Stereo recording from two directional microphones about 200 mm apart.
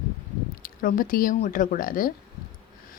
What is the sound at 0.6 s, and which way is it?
Speech, 45° left (ahead or behind).